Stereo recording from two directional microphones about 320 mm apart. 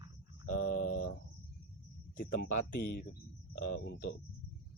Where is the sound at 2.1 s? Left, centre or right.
Left.